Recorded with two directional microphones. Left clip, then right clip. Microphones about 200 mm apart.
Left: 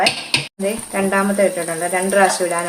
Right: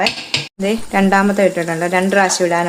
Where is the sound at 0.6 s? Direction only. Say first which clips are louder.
Right 4 dB; 45° right (ahead or behind).